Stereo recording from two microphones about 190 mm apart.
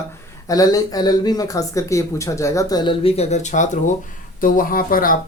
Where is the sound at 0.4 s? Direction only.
20° left (ahead or behind).